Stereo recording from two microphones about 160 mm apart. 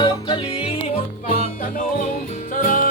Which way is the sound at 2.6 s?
55° left (ahead or behind).